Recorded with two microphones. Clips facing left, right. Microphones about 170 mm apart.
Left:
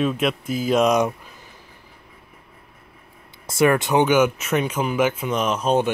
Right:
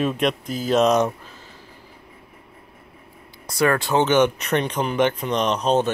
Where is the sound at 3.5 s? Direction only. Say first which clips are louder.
Left 2 dB; 20° left (ahead or behind).